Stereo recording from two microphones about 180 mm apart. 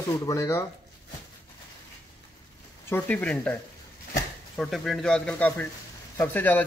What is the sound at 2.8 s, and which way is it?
Speech, 10° left (ahead or behind).